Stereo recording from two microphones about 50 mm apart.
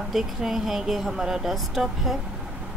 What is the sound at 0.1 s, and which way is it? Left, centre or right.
Speech, centre.